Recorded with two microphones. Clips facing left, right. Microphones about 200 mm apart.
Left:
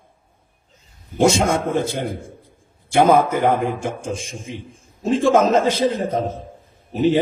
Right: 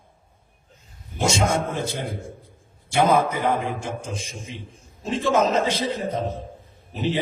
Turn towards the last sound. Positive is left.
turn(degrees=50)  # may be behind; listen again after turning